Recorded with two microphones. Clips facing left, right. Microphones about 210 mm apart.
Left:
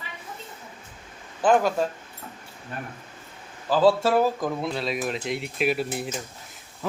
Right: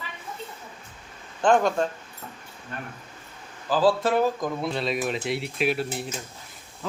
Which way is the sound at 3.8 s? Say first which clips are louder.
Left 2 dB; 25° left (ahead or behind).